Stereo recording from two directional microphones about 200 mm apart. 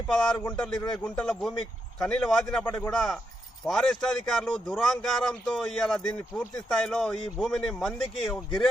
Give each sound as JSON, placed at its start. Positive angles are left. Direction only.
{"t": 0.1, "sound": "speech", "side_deg": 5}